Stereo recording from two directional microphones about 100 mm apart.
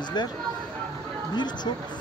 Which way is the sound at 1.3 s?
45° left (ahead or behind).